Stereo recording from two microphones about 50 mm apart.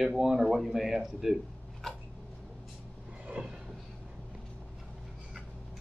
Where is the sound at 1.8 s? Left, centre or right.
Centre.